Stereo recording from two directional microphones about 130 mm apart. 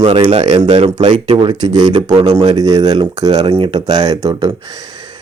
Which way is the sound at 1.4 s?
35° right (ahead or behind).